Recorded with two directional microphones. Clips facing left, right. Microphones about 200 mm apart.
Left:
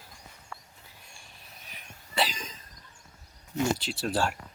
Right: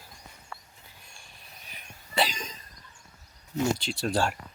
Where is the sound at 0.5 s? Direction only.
5° right (ahead or behind).